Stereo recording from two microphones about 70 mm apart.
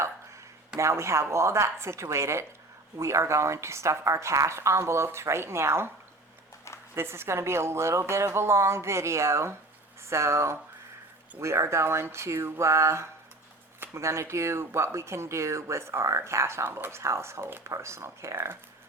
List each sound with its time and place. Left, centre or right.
0.8 s a woman's voice: right
6.9 s a woman's voice: right